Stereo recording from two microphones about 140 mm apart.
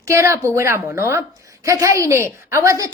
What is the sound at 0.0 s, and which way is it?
A woman's voice, 20° right (ahead or behind).